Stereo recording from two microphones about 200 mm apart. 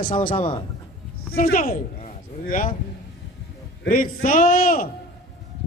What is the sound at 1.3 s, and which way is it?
Speech, 45° left (ahead or behind).